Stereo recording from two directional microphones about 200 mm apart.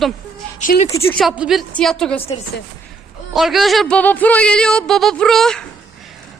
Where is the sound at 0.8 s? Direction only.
15° left (ahead or behind).